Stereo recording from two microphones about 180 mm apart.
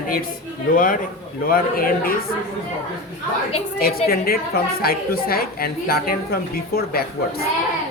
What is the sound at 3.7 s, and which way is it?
A woman's voice, 55° left (ahead or behind).